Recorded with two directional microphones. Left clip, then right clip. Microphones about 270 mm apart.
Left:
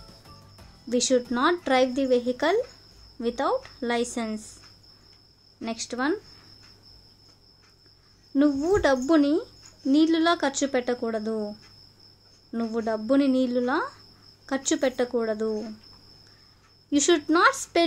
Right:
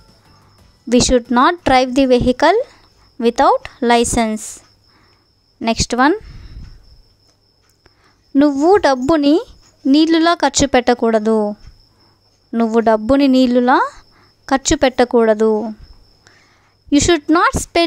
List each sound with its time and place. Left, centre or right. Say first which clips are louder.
0.0 s music: even; centre
0.8 s speech: right 10 dB; right
5.6 s speech: right 15 dB; right
8.3 s speech: right 11 dB; right
16.9 s speech: right 9 dB; right